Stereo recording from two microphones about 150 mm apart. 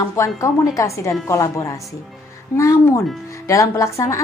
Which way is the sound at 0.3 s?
20° left (ahead or behind).